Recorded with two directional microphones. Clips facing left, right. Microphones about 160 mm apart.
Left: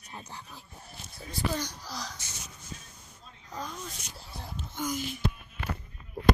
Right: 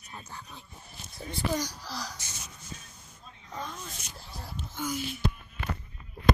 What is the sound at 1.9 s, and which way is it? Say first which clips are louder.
Speech: right 1 dB; 5° right (ahead or behind).